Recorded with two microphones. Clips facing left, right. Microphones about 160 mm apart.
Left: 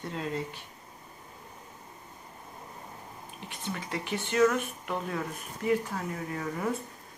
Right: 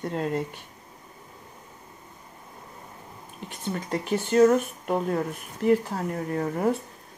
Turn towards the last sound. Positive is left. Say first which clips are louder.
# right 7 dB
turn(degrees=-40)  # may be behind; listen again after turning